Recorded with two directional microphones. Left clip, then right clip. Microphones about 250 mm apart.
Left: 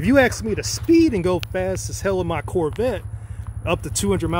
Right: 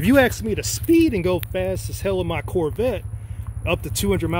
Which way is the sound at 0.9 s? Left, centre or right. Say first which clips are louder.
Left 1 dB; centre.